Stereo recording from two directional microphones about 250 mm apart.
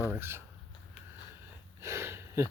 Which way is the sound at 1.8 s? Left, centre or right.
Centre.